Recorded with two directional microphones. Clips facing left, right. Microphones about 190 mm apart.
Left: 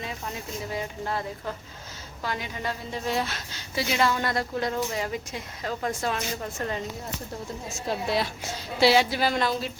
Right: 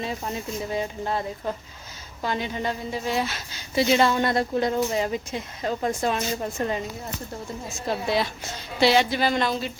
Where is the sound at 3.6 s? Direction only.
25° right (ahead or behind).